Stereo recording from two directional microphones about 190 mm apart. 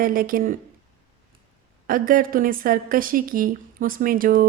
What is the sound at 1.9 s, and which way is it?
A woman's voice, 45° right (ahead or behind).